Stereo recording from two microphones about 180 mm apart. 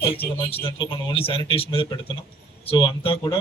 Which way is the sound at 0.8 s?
30° left (ahead or behind).